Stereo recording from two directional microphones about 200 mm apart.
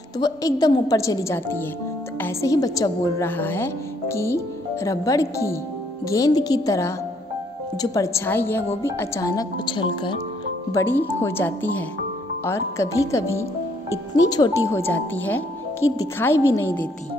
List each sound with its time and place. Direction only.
0.2 s a woman's voice: 20° left (ahead or behind)
10.7 s a woman's voice: 10° left (ahead or behind)